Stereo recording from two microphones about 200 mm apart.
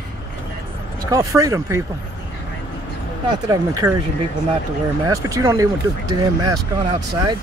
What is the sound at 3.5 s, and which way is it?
Speech, 15° right (ahead or behind).